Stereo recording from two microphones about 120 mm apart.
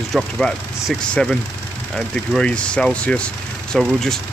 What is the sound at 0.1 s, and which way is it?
Speech, 5° left (ahead or behind).